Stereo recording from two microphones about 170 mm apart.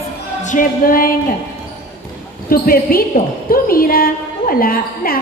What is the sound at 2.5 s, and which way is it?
A woman's voice, 60° left (ahead or behind).